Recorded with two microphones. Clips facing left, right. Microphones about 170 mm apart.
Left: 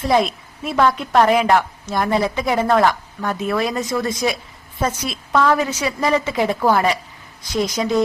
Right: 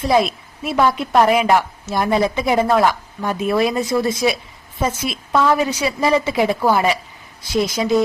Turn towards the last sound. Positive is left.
turn(degrees=-10)  # may be behind; listen again after turning